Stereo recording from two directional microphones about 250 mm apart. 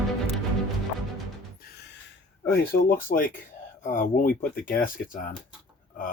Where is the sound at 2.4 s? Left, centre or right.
Left.